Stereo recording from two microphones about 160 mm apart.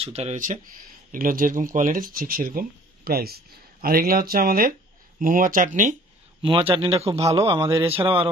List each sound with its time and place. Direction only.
0.0 s speech: 40° right (ahead or behind)
1.1 s speech: 60° right (ahead or behind)
6.4 s a man's voice: 30° right (ahead or behind)